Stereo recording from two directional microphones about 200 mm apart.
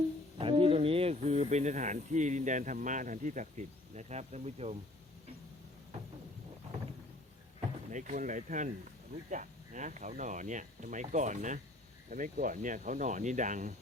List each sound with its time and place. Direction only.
0.3 s speech: 25° right (ahead or behind)
7.9 s speech: 40° right (ahead or behind)